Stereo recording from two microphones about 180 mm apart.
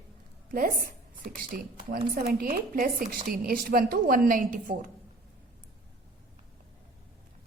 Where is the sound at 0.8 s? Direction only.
55° right (ahead or behind).